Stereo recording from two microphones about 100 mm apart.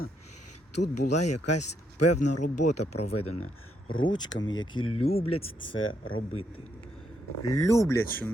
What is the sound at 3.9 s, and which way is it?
Speech, 50° left (ahead or behind).